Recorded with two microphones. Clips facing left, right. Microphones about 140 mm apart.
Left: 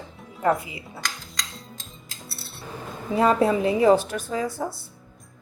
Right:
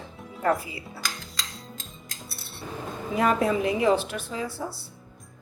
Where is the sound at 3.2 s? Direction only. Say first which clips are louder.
Left 3 dB; 30° left (ahead or behind).